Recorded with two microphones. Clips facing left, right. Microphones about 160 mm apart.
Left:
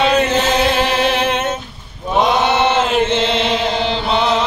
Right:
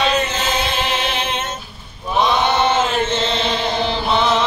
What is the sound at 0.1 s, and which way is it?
Music, 65° left (ahead or behind).